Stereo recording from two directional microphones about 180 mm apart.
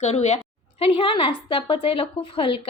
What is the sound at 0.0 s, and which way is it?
A woman's voice, 35° left (ahead or behind).